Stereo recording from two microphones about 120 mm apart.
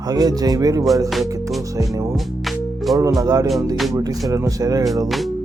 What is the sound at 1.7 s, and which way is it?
Speech, 25° right (ahead or behind).